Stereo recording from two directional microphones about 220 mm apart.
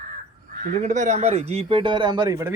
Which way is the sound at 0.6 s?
35° right (ahead or behind).